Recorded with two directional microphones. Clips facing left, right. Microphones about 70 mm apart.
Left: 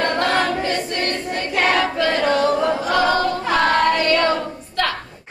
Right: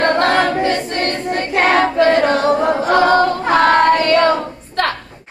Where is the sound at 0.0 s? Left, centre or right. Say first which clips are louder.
Right 5 dB; right.